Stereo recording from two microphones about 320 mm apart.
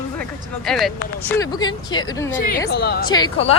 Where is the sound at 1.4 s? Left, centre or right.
Centre.